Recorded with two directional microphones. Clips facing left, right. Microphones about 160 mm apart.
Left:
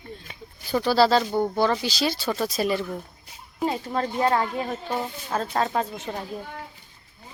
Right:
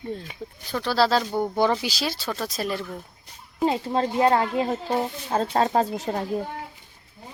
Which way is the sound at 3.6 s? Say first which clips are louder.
Right 3 dB; 25° right (ahead or behind).